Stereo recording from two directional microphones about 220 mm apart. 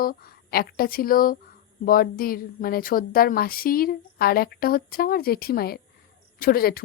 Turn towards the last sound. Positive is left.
turn(degrees=40)  # may be behind; listen again after turning